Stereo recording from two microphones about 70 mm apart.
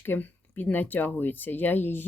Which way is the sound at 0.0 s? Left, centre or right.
Left.